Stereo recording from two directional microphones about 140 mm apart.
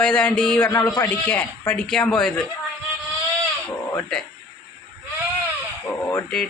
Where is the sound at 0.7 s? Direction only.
25° left (ahead or behind).